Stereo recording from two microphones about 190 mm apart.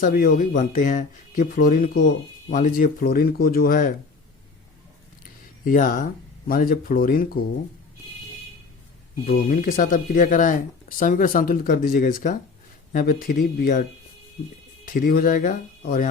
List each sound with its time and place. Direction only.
0.0 s speech: 45° left (ahead or behind)
5.6 s speech: 45° left (ahead or behind)
9.2 s speech: 50° left (ahead or behind)
14.8 s speech: 45° left (ahead or behind)